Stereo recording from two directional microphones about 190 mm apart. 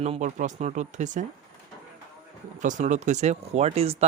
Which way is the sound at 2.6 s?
40° right (ahead or behind).